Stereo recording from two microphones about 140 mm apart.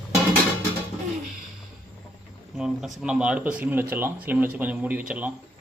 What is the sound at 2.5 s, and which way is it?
Speech, 5° right (ahead or behind).